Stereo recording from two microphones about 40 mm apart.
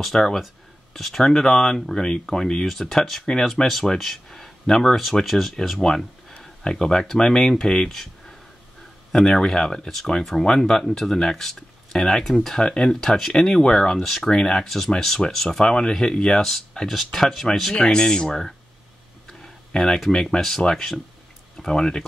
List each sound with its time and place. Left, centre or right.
0.0 s speech: centre
2.6 s speech: centre
4.0 s a sound: centre
5.2 s speech: centre
12.5 s speech: left
14.0 s speech: centre
14.3 s speech: centre
16.3 s speech: centre
17.7 s speech: left
19.2 s tick-tock: centre
20.2 s speech: centre